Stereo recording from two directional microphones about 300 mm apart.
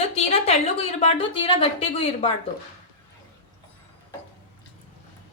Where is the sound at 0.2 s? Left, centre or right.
Centre.